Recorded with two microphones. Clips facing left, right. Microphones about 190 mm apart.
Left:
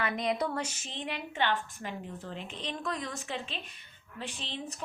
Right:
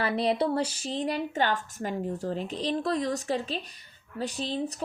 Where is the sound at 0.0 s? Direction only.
35° right (ahead or behind).